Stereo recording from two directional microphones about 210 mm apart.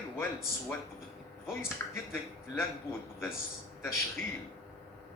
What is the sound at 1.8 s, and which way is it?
Speech, 15° left (ahead or behind).